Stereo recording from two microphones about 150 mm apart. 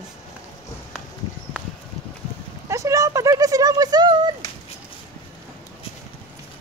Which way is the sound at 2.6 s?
20° right (ahead or behind).